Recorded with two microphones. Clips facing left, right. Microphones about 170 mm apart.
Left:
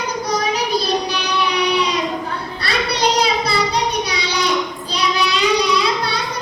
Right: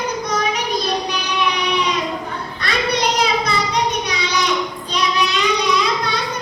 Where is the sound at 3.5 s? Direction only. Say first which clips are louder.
Left 1 dB; 35° left (ahead or behind).